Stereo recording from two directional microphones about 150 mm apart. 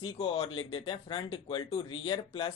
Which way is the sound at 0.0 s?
35° left (ahead or behind).